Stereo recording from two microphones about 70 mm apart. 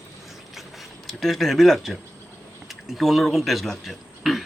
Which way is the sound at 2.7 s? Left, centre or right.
Centre.